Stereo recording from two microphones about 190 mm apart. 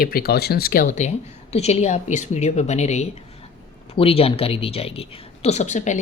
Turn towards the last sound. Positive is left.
turn(degrees=40)  # may be behind; listen again after turning